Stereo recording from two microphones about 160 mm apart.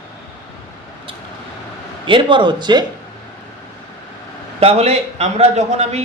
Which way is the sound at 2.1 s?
30° right (ahead or behind).